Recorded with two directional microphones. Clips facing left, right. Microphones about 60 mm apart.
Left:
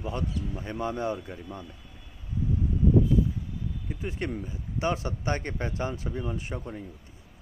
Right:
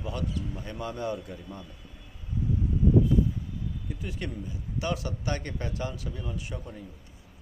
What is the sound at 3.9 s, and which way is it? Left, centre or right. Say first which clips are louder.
A man's voice: left 7 dB; left.